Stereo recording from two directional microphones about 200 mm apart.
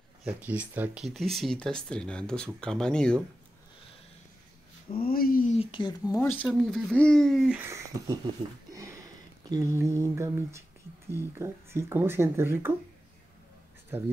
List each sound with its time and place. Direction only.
0.2 s speech: 5° right (ahead or behind)
4.9 s speech: 45° left (ahead or behind)
5.6 s speech: 25° left (ahead or behind)
6.1 s speech: 10° left (ahead or behind)
6.4 s speech: centre (ahead or behind)
8.7 s a sound: 15° right (ahead or behind)
9.5 s speech: 15° right (ahead or behind)